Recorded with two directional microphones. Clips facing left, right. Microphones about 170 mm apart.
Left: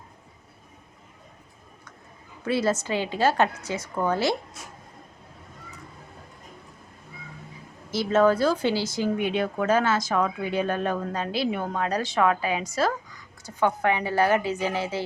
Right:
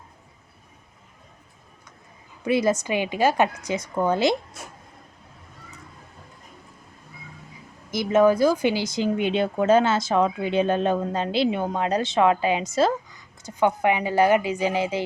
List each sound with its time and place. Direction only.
2.4 s a woman's voice: 15° right (ahead or behind)
7.9 s a woman's voice: 15° right (ahead or behind)